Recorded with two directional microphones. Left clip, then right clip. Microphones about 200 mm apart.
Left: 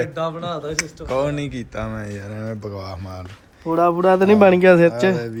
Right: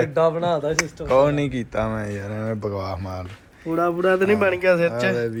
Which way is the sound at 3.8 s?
35° left (ahead or behind).